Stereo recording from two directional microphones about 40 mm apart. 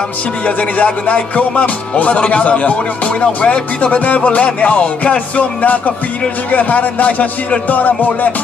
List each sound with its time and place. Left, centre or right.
0.5 s music: left